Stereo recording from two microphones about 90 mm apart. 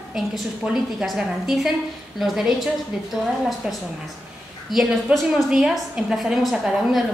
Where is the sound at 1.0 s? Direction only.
5° right (ahead or behind).